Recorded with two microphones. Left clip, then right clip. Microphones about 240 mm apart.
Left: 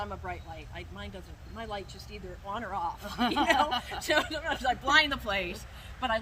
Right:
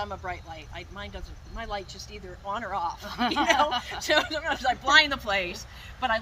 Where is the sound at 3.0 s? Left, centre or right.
Centre.